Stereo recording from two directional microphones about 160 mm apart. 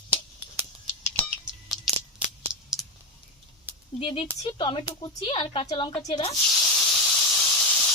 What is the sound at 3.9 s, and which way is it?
Speech, 40° left (ahead or behind).